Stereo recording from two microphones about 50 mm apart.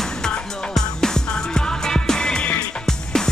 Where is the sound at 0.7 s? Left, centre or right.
Centre.